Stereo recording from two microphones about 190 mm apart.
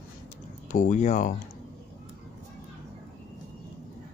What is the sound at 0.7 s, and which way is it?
Speech, 40° left (ahead or behind).